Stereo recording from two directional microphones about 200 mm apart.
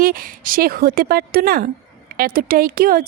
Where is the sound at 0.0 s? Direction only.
45° right (ahead or behind).